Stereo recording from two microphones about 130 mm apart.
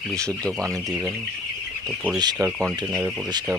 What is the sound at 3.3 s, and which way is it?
Speech, 30° right (ahead or behind).